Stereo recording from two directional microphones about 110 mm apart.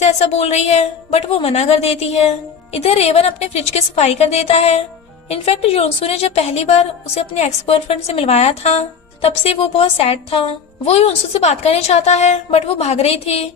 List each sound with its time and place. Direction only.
0.0 s a woman's voice: 80° left
5.3 s a woman's voice: 65° left (ahead or behind)